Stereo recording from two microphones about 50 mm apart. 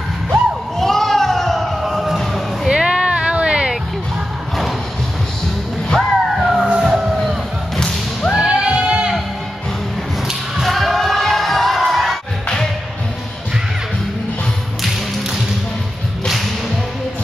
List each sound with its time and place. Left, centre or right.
0.7 s a sound: centre
2.7 s a sound: centre
5.9 s music: centre
6.7 s vehicle: centre
8.4 s music: right
10.6 s crowd: centre